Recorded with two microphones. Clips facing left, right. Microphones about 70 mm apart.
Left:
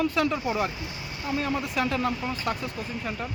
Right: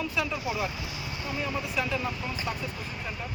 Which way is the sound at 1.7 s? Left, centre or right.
Left.